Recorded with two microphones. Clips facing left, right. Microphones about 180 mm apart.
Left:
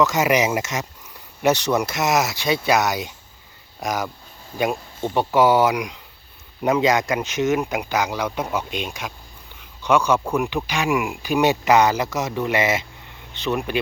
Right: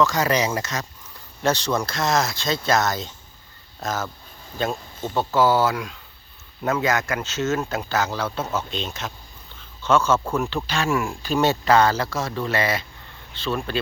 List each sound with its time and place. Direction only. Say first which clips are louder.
0.0 s speech: left 2 dB; 20° left (ahead or behind)